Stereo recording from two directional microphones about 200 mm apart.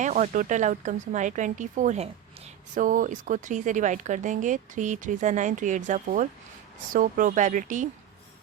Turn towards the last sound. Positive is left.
turn(degrees=-40)  # may be behind; listen again after turning